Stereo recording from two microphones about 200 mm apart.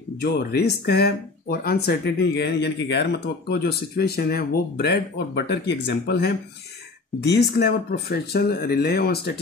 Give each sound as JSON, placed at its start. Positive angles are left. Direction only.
{"t": 0.2, "sound": "speech", "side_deg": 50}